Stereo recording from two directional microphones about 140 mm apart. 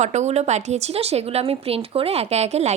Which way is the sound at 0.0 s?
55° right (ahead or behind).